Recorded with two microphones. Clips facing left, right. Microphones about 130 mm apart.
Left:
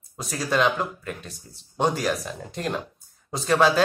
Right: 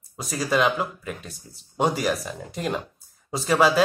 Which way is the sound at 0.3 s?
Centre (ahead or behind).